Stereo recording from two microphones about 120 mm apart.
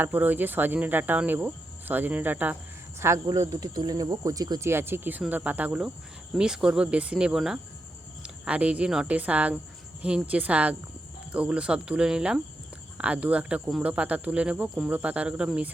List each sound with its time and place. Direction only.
0.0 s speech: 15° right (ahead or behind)
3.0 s speech: 25° right (ahead or behind)
4.7 s speech: 20° right (ahead or behind)